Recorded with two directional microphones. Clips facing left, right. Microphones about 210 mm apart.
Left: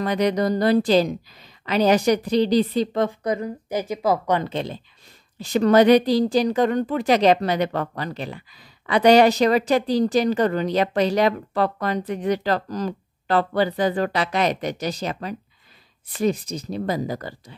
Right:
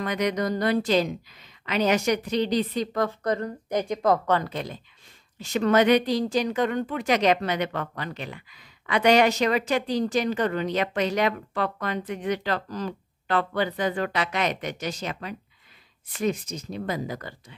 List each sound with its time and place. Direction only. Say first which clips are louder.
0.0 s speech: left 5 dB; 30° left (ahead or behind)
3.3 s a woman's voice: left 2 dB; 10° left (ahead or behind)
4.3 s a woman's voice: left 3 dB; 25° left (ahead or behind)